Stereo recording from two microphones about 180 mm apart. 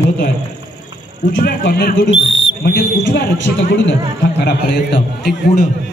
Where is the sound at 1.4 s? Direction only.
60° left (ahead or behind).